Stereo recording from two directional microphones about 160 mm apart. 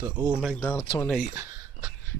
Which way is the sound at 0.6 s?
15° left (ahead or behind).